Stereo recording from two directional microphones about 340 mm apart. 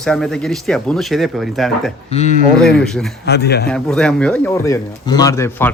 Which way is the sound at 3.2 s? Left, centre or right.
Left.